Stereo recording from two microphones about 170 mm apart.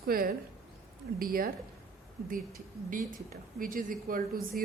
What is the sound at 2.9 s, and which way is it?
A woman's voice, 55° right (ahead or behind).